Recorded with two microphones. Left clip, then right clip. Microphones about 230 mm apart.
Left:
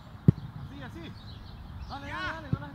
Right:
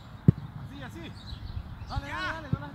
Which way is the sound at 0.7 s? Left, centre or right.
Right.